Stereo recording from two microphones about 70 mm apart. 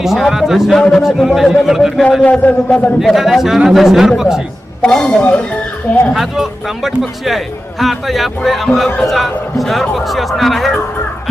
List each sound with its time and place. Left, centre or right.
0.0 s a man's voice: centre
2.2 s a man's voice: centre
3.0 s a man's voice: centre
4.8 s a man's voice: centre
6.1 s a man's voice: centre